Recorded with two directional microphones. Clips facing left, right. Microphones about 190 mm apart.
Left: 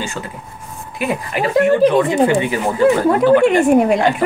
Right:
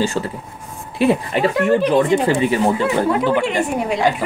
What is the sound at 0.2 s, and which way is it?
Speech, 35° right (ahead or behind).